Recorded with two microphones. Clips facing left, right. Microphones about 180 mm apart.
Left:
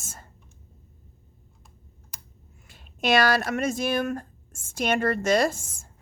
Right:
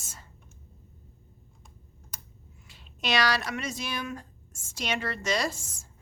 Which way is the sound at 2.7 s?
50° left (ahead or behind).